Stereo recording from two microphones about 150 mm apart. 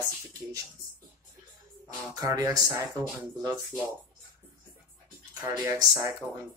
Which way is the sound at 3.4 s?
25° right (ahead or behind).